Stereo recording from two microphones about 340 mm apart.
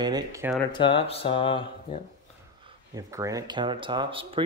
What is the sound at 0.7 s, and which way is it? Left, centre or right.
Speech, centre.